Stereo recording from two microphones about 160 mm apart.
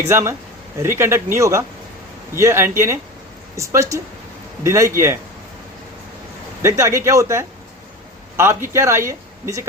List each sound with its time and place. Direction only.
0.1 s speech: 15° right (ahead or behind)
6.6 s speech: 20° right (ahead or behind)